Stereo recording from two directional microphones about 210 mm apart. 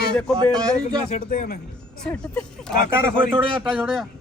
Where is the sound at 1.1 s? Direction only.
40° left (ahead or behind).